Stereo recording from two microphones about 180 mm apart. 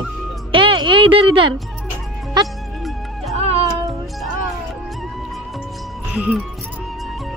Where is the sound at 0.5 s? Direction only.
30° right (ahead or behind).